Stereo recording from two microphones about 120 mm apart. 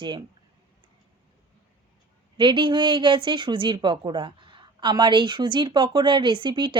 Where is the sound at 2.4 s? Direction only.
40° right (ahead or behind).